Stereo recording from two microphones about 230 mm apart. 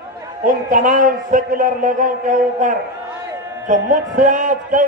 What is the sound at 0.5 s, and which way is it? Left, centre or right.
A man's voice, right.